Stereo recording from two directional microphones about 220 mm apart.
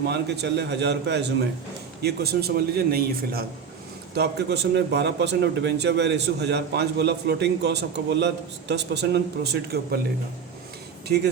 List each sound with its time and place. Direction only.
0.0 s a man's voice: 50° right (ahead or behind)